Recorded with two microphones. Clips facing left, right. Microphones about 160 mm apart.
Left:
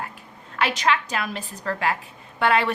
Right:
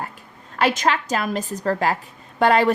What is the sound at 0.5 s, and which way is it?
Speech, 45° right (ahead or behind).